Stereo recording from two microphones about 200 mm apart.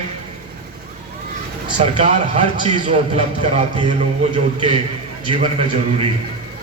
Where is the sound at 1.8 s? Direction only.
30° right (ahead or behind).